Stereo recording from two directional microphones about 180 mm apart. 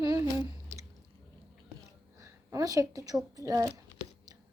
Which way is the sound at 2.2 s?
15° right (ahead or behind).